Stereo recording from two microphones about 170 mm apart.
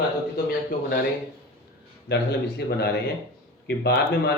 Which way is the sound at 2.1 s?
80° left.